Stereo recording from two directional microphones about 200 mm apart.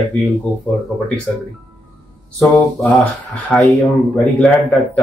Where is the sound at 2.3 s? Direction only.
5° left (ahead or behind).